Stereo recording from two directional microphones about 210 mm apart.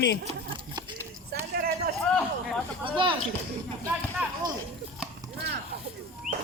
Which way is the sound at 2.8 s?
25° right (ahead or behind).